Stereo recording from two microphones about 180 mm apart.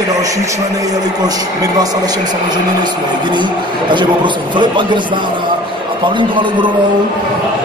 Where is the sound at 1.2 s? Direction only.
20° right (ahead or behind).